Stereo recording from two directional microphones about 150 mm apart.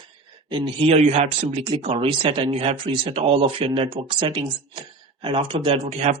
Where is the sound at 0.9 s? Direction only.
45° right (ahead or behind).